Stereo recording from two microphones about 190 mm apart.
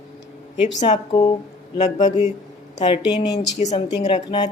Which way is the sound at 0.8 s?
20° left (ahead or behind).